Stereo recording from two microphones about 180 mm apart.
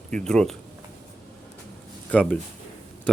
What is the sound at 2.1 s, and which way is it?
Speech, 10° left (ahead or behind).